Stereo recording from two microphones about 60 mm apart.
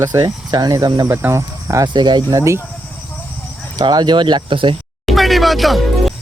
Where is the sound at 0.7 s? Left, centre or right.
Right.